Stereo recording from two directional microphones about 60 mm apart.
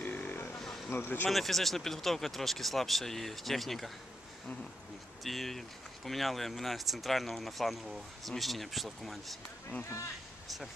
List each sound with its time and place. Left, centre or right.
0.0 s a sound: left
0.8 s speech: left
1.3 s speech: centre
5.2 s speech: centre